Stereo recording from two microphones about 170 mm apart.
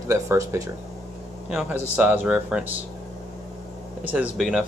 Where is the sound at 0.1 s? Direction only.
15° right (ahead or behind).